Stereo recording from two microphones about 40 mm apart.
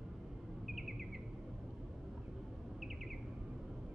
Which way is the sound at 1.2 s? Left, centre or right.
Centre.